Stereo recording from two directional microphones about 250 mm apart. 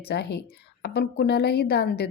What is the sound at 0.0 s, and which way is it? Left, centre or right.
A woman's voice, left.